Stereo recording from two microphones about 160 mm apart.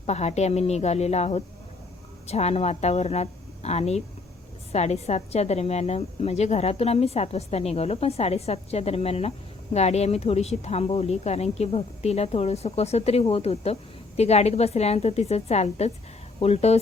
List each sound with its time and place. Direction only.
0.0 s a woman's voice: 40° left (ahead or behind)